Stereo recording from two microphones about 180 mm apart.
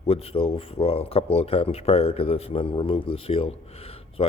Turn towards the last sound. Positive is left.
turn(degrees=35)  # may be behind; listen again after turning